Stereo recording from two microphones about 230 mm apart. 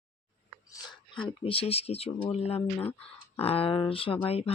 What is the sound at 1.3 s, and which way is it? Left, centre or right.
Speech, left.